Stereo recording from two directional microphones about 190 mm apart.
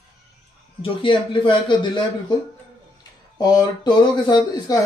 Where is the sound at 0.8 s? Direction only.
25° left (ahead or behind).